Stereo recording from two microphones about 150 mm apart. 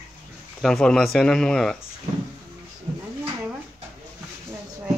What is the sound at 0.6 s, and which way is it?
A man's voice, 5° left (ahead or behind).